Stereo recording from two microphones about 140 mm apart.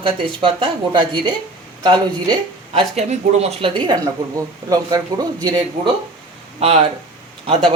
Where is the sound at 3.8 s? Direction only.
30° right (ahead or behind).